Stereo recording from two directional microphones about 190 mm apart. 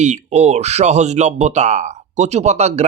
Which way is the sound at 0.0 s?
35° right (ahead or behind).